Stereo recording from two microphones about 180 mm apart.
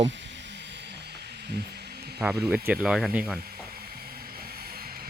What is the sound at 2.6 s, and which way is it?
Speech, 5° right (ahead or behind).